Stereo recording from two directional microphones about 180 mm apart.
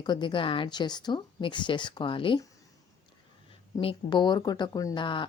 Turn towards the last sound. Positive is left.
turn(degrees=25)  # may be behind; listen again after turning